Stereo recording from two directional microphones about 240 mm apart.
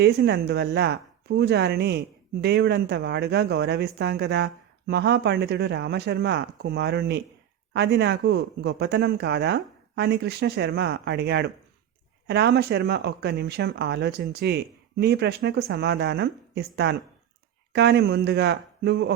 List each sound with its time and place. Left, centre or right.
0.0 s a woman's voice: right